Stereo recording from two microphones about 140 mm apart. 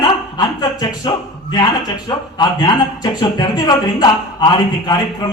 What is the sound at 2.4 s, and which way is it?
Speech, 30° left (ahead or behind).